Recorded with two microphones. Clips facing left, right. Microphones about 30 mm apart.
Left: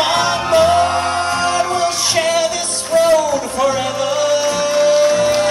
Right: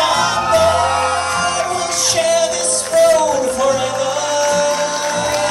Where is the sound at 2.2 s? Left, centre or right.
Left.